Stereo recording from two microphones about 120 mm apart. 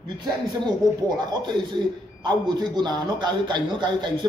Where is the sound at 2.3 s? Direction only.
35° right (ahead or behind).